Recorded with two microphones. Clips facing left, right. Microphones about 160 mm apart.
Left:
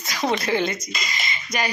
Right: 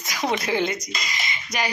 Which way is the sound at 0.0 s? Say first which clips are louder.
Left 2 dB; 15° right (ahead or behind).